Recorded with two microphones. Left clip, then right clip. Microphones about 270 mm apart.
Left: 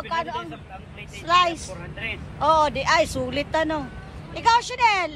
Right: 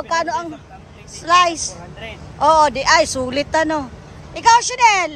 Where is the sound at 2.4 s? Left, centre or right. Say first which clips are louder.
Right 6 dB; centre.